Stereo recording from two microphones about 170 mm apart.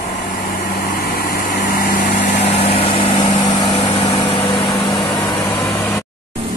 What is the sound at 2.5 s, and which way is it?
Vehicle, 35° left (ahead or behind).